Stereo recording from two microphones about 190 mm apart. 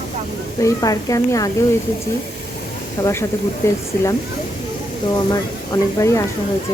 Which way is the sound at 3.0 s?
15° left (ahead or behind).